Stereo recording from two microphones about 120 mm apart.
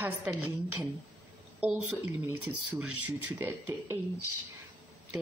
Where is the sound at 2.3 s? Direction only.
15° right (ahead or behind).